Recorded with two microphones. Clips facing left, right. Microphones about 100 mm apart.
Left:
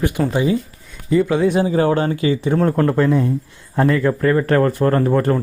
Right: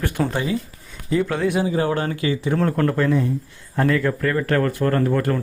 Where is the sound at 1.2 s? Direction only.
10° left (ahead or behind).